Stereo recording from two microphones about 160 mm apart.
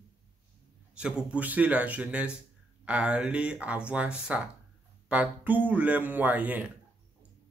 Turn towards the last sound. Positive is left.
turn(degrees=-10)  # may be behind; listen again after turning